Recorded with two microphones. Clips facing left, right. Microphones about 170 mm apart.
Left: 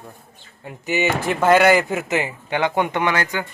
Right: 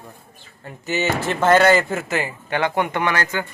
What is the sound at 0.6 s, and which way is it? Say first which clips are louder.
Speech: left 1 dB; 15° left (ahead or behind).